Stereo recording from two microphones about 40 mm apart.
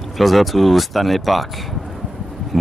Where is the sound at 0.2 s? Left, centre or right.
Centre.